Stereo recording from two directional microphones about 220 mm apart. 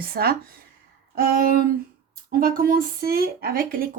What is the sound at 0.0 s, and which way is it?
Speech, 45° right (ahead or behind).